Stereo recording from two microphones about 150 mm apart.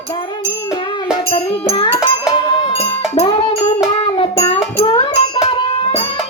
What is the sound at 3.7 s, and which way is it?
Child singing, 40° left (ahead or behind).